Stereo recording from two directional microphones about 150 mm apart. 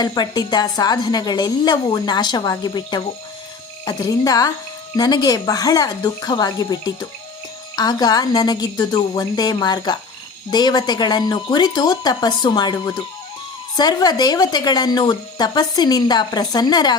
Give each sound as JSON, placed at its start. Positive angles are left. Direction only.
{"t": 0.0, "sound": "speech", "side_deg": 25}